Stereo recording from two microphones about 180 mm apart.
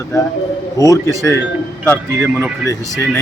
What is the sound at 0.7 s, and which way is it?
Speech, 20° left (ahead or behind).